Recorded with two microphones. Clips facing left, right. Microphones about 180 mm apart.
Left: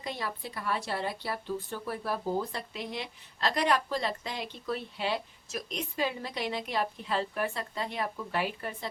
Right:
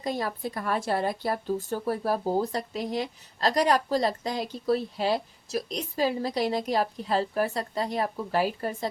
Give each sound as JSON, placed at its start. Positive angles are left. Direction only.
{"t": 0.0, "sound": "speech", "side_deg": -40}